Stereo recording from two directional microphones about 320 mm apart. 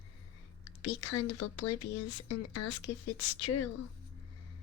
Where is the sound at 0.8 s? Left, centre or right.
Left.